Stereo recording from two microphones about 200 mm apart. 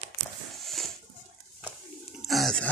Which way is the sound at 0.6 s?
Centre (ahead or behind).